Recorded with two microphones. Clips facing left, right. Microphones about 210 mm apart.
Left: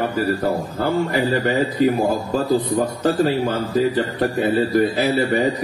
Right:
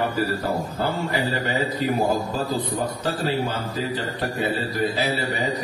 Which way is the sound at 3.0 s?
50° left (ahead or behind).